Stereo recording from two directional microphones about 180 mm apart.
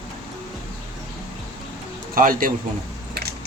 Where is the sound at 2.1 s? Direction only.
50° right (ahead or behind).